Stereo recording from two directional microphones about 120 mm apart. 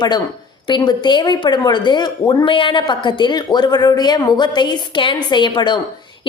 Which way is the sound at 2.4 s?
45° left (ahead or behind).